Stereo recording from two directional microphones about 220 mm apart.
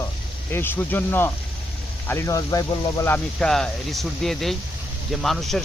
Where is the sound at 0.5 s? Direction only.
10° left (ahead or behind).